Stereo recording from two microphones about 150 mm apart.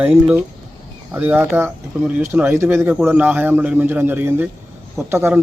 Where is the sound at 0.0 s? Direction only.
10° right (ahead or behind).